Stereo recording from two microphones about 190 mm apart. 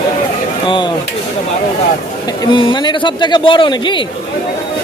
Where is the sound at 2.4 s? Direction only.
25° left (ahead or behind).